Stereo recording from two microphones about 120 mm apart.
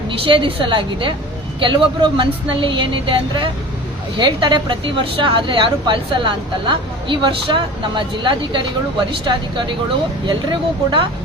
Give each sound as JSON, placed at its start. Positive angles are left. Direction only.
{"t": 0.1, "sound": "speech", "side_deg": -45}